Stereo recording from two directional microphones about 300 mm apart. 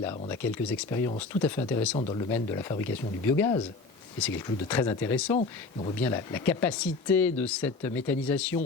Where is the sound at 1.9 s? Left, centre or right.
Centre.